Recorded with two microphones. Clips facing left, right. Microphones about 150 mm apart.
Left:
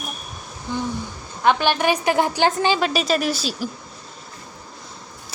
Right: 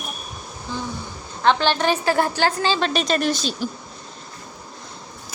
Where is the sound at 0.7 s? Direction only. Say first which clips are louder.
Left 4 dB; 15° left (ahead or behind).